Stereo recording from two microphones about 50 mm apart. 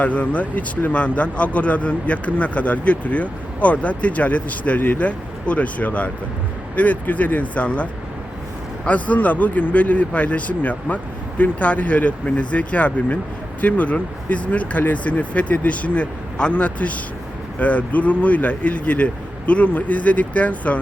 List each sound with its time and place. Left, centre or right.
0.0 s speech: left